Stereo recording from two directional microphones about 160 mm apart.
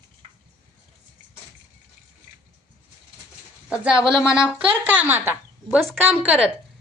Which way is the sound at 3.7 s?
5° right (ahead or behind).